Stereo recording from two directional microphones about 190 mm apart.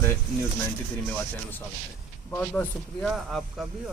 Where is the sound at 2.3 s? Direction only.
10° left (ahead or behind).